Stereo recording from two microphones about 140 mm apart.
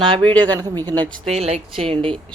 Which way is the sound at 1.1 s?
Centre (ahead or behind).